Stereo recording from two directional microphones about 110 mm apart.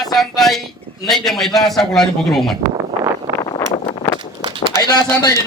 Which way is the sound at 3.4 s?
35° left (ahead or behind).